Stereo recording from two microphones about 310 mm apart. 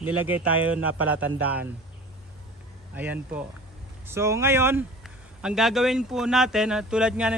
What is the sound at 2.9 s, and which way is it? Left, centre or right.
Speech, centre.